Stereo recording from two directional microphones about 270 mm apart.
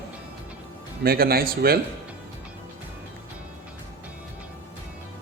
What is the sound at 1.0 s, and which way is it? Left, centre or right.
Speech, right.